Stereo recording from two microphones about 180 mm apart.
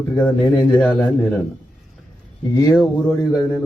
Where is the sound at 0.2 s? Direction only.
10° left (ahead or behind).